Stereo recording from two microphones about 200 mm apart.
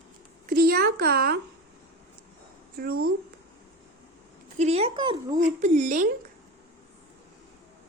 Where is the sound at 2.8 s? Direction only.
50° right (ahead or behind).